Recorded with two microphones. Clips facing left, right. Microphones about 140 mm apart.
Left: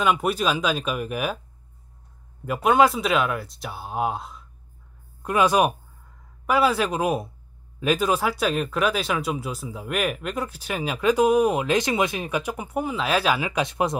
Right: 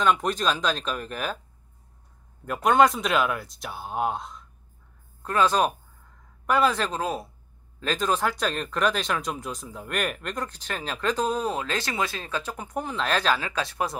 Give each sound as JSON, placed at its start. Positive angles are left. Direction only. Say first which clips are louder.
{"t": 0.0, "sound": "speech", "louder": "left 1 dB", "side_deg": 10}
{"t": 2.4, "sound": "speech", "louder": "left 1 dB", "side_deg": 5}